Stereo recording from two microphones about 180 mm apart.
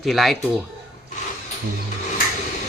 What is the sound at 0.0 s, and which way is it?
Speech, centre (ahead or behind).